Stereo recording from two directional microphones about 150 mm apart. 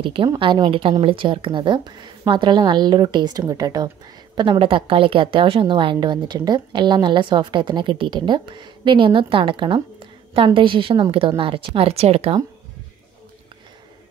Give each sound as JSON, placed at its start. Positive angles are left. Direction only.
{"t": 0.0, "sound": "a woman's voice", "side_deg": -35}